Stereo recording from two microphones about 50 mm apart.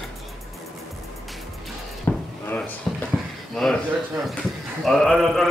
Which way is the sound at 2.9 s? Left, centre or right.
Centre.